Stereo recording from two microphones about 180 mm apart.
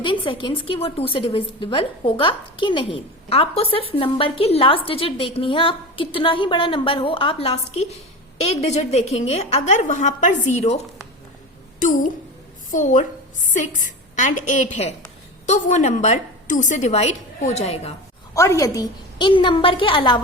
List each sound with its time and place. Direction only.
0.0 s a woman's voice: 30° left (ahead or behind)
11.8 s a child's voice: 45° left (ahead or behind)
18.3 s a woman's voice: 20° left (ahead or behind)